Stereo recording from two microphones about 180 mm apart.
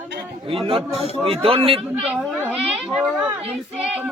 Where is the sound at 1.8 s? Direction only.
5° right (ahead or behind).